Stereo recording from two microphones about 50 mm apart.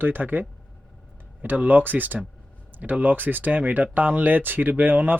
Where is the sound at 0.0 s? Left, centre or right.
Right.